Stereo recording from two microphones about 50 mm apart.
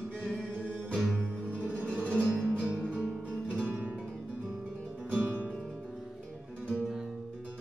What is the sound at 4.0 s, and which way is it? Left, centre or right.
Guitar, centre.